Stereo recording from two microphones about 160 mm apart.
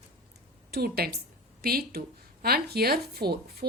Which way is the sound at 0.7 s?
75° right (ahead or behind).